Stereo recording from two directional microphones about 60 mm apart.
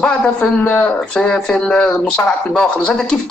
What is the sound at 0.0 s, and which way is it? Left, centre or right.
Speech, centre.